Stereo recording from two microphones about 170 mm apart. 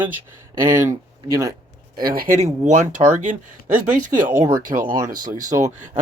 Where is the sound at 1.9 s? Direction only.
60° right (ahead or behind).